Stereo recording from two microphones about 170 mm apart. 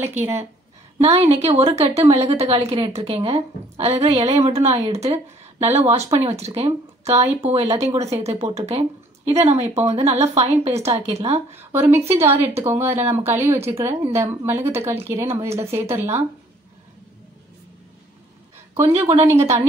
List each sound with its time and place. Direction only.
0.2 s speech: 15° right (ahead or behind)
0.9 s a woman's voice: 40° right (ahead or behind)
12.2 s speech: 15° right (ahead or behind)
18.8 s a woman's voice: 40° right (ahead or behind)
19.2 s speech: 15° right (ahead or behind)